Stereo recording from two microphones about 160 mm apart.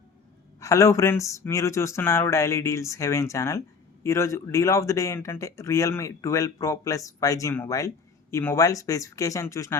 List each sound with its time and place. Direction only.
0.6 s speech: 20° left (ahead or behind)